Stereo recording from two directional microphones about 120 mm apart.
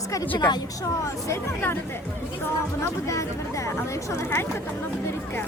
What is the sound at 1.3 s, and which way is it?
Speech, 20° left (ahead or behind).